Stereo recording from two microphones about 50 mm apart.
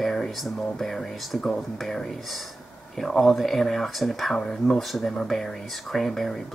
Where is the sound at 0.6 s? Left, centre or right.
Centre.